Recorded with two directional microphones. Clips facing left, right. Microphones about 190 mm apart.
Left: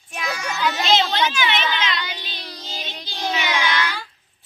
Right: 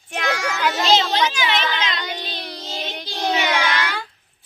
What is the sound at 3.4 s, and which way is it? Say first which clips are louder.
Child singing: right 1 dB; 45° right (ahead or behind).